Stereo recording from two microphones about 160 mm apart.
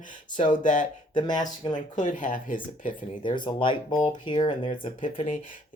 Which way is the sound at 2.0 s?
55° left (ahead or behind).